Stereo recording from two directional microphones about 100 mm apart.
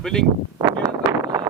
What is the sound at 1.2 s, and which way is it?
Wind noise, 35° right (ahead or behind).